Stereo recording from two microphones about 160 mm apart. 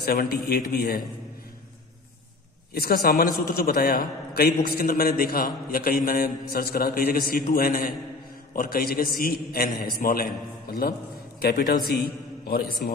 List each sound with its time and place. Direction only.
0.0 s a man's voice: 70° left (ahead or behind)
2.7 s a man's voice: 75° left (ahead or behind)